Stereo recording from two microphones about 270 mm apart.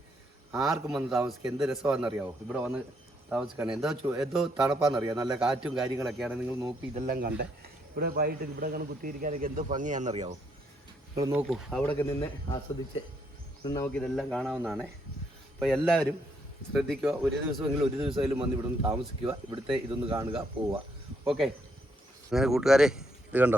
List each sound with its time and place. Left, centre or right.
0.6 s speech: centre
4.9 s a man's voice: centre
5.3 s speech: centre
6.9 s speech: right
11.2 s speech: centre
13.7 s speech: centre
18.0 s a man's voice: centre
21.2 s speech: centre